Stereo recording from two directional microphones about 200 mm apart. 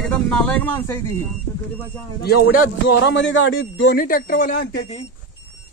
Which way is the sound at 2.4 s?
75° left (ahead or behind).